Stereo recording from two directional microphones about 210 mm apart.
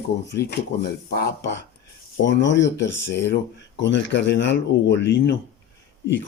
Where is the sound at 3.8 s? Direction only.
60° left (ahead or behind).